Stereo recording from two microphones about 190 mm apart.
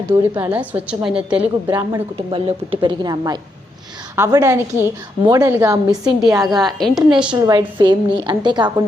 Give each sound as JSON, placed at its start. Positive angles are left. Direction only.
{"t": 0.3, "sound": "a woman's voice", "side_deg": -10}
{"t": 1.7, "sound": "a woman's voice", "side_deg": -25}
{"t": 6.4, "sound": "a woman's voice", "side_deg": 0}
{"t": 7.3, "sound": "a woman's voice", "side_deg": -20}